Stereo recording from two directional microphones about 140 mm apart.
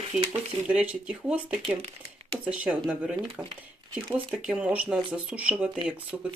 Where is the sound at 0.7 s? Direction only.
10° right (ahead or behind).